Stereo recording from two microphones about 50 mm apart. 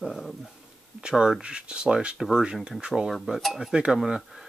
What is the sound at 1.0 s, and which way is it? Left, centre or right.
Speech, centre.